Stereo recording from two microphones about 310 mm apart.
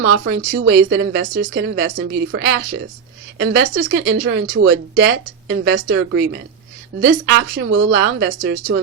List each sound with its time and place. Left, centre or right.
0.0 s speech: right